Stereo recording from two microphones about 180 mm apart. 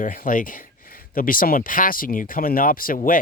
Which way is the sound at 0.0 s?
50° left (ahead or behind).